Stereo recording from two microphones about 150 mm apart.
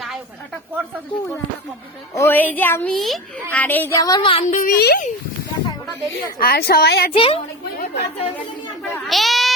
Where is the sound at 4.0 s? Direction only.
25° left (ahead or behind).